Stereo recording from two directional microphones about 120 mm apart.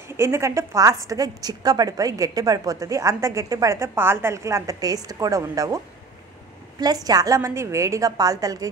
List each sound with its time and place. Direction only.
0.2 s a woman's voice: 25° right (ahead or behind)
6.8 s a woman's voice: 35° right (ahead or behind)